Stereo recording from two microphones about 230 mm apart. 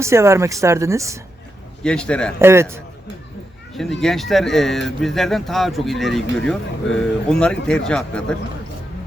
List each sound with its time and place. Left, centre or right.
0.0 s speech: centre
1.8 s speech: centre
2.4 s speech: centre
4.0 s speech: centre